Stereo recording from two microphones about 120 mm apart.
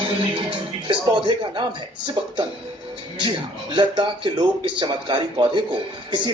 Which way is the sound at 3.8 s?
40° right (ahead or behind).